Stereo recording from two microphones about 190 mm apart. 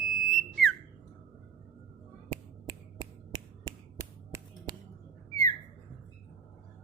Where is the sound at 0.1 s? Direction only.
Centre (ahead or behind).